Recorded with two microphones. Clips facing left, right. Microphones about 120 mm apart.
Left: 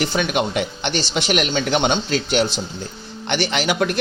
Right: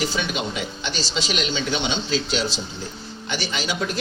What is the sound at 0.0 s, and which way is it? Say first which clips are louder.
A man's voice: left 5 dB; 60° left (ahead or behind).